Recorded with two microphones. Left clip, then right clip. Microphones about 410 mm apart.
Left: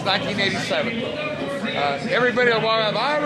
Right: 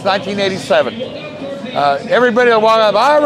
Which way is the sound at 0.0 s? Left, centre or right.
Right.